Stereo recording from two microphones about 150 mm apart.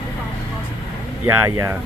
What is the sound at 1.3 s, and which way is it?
Speech, 15° right (ahead or behind).